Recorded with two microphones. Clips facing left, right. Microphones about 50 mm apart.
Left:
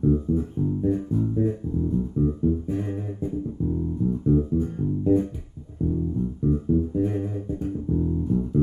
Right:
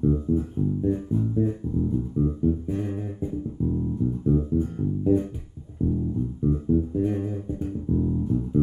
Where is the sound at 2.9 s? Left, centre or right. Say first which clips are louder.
Left 1 dB; centre.